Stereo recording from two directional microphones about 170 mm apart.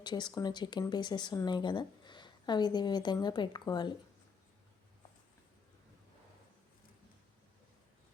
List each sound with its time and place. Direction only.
0.0 s speech: 25° left (ahead or behind)